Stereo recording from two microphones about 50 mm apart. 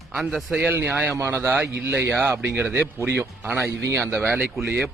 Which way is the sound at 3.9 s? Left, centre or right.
Right.